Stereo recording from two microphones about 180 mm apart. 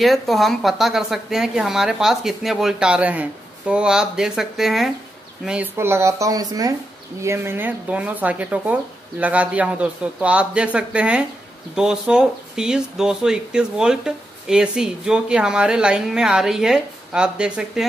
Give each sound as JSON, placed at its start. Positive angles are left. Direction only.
{"t": 0.0, "sound": "speech", "side_deg": 0}